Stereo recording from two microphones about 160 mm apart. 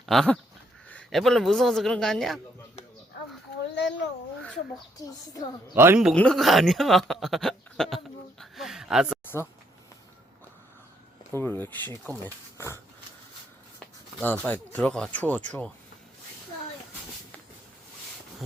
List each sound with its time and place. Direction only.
0.0 s goat: centre (ahead or behind)
0.9 s speech: 5° left (ahead or behind)
3.8 s a sound: 90° left
4.9 s speech: 25° left (ahead or behind)
5.7 s a man's voice: 15° right (ahead or behind)
6.1 s speech: 5° left (ahead or behind)
11.3 s speech: 15° left (ahead or behind)